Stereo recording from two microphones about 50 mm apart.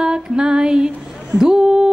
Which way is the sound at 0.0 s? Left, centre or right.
Centre.